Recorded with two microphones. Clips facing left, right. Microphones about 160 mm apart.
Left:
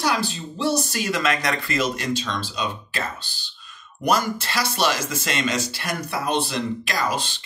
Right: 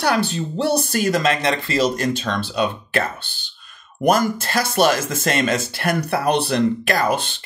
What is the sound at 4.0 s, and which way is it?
Speech, 50° right (ahead or behind).